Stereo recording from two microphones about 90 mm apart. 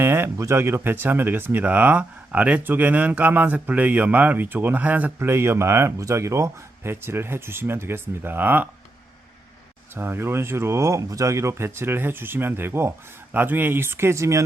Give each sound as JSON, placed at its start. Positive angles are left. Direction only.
{"t": 0.0, "sound": "speech", "side_deg": -25}
{"t": 9.9, "sound": "speech", "side_deg": -25}